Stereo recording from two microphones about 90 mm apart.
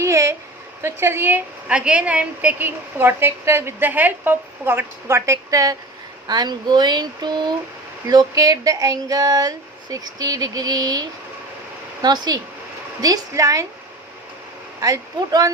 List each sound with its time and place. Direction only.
0.0 s a sound: 35° right (ahead or behind)
0.8 s a woman's voice: 25° right (ahead or behind)
1.6 s a woman's voice: 10° right (ahead or behind); by 5.7 s 40° right (ahead or behind)
6.2 s speech: 50° right (ahead or behind)
8.0 s speech: 45° right (ahead or behind)
12.0 s speech: 50° right (ahead or behind)
13.0 s a woman's voice: 40° right (ahead or behind)
14.8 s a woman's voice: 40° right (ahead or behind)